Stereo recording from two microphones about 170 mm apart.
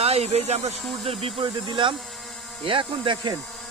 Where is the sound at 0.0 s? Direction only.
40° right (ahead or behind).